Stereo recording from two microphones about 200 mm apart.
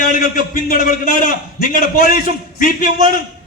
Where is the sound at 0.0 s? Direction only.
40° left (ahead or behind).